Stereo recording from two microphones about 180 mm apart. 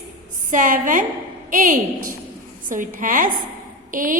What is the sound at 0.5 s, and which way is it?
A woman's voice, 45° right (ahead or behind).